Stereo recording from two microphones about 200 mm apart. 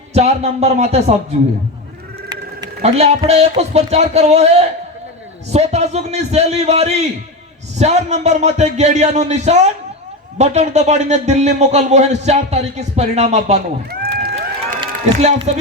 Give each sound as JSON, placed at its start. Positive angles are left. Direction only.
{"t": 0.1, "sound": "speech", "side_deg": -30}
{"t": 2.8, "sound": "speech", "side_deg": -30}
{"t": 13.9, "sound": "cheering", "side_deg": -50}
{"t": 14.8, "sound": "run", "side_deg": -30}